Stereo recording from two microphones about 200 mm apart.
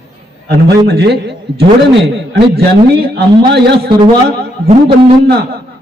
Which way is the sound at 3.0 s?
55° right (ahead or behind).